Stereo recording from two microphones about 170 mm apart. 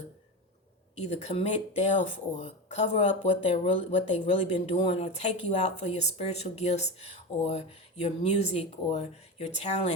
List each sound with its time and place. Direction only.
0.9 s speech: 35° left (ahead or behind)